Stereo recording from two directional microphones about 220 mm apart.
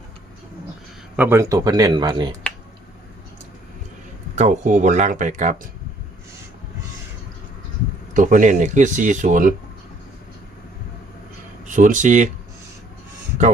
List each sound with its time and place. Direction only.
1.1 s speech: 10° right (ahead or behind)
4.4 s speech: 35° right (ahead or behind)
8.1 s speech: 35° right (ahead or behind)
11.6 s speech: 35° right (ahead or behind)